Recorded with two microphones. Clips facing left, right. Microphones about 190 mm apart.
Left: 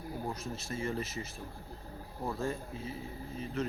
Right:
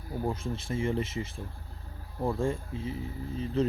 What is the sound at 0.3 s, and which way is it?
Speech, 25° right (ahead or behind).